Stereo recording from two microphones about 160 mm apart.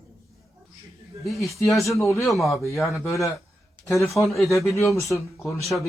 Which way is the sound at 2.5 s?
20° left (ahead or behind).